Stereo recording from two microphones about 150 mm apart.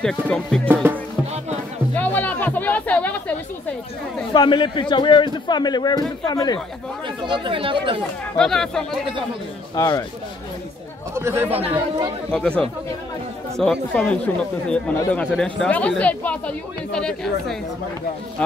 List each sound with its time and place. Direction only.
0.0 s speech: 5° left (ahead or behind)
0.8 s music: 15° right (ahead or behind)
2.0 s music: 10° left (ahead or behind)
4.3 s a man's voice: 30° left (ahead or behind)
7.2 s speech: 35° right (ahead or behind)
8.4 s speech: 5° left (ahead or behind)
9.8 s a man's voice: 25° left (ahead or behind)
11.1 s speech: 15° right (ahead or behind)
12.3 s speech: 5° left (ahead or behind)